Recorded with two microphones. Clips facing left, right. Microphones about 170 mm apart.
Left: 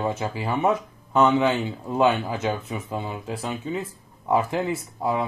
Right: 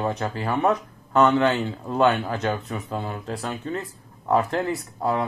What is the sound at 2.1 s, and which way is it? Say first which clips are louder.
Speech: right 1 dB; centre (ahead or behind).